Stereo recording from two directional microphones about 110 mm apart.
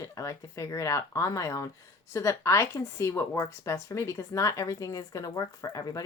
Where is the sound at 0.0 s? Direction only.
30° left (ahead or behind).